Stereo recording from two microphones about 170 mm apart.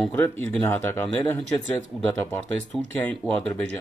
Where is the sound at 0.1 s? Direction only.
10° left (ahead or behind).